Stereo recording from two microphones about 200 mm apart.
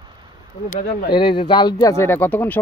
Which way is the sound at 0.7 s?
40° left (ahead or behind).